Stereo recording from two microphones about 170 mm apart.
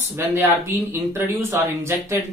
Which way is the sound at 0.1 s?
15° right (ahead or behind).